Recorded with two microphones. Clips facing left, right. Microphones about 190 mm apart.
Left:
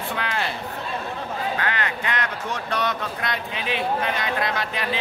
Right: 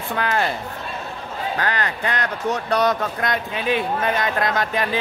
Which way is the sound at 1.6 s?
40° right (ahead or behind).